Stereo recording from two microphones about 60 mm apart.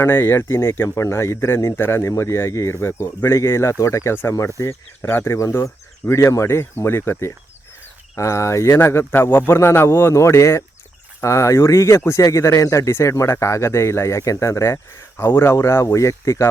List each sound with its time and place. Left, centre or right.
0.0 s speech: left
5.4 s speech: left
8.1 s speech: left
15.2 s speech: left
15.5 s speech: left